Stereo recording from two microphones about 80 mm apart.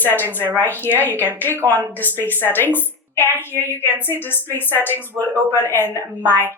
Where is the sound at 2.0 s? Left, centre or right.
Left.